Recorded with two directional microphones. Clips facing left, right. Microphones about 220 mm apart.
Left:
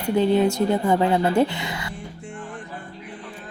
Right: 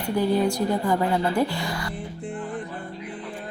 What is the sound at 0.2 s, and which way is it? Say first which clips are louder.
Speech: left 3 dB; 25° left (ahead or behind).